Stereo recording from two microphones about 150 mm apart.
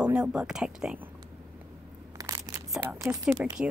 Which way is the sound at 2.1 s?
25° right (ahead or behind).